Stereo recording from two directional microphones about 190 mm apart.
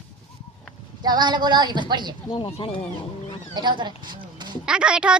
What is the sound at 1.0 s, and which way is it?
A woman's voice, 25° right (ahead or behind).